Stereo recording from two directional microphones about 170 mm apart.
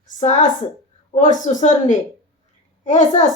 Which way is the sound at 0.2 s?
45° left (ahead or behind).